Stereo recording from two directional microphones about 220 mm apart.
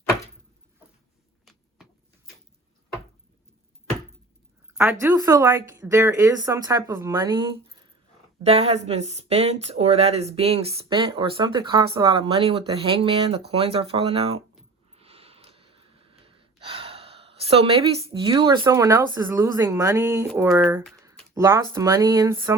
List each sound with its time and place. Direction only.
1.5 s a sound: centre (ahead or behind)
4.8 s a woman's voice: 10° right (ahead or behind)
8.4 s speech: 30° right (ahead or behind)
14.9 s gasp: 25° right (ahead or behind)
18.6 s a woman's voice: 15° right (ahead or behind)